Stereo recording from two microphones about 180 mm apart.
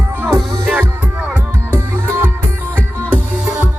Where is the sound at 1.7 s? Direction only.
10° right (ahead or behind).